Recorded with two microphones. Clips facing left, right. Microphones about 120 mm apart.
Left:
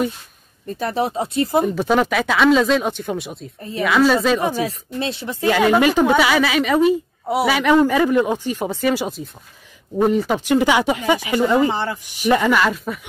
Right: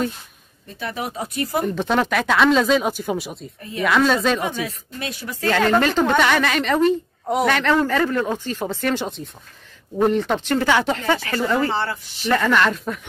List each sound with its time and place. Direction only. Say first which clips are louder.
0.7 s speech: left 6 dB; 35° left (ahead or behind)
1.7 s speech: left 2 dB; 5° left (ahead or behind)
4.4 s speech: left 4 dB; 35° left (ahead or behind)
5.4 s a woman's voice: left 3 dB; 10° left (ahead or behind)